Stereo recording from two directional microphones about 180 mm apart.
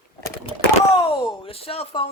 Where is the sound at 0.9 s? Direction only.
30° left (ahead or behind).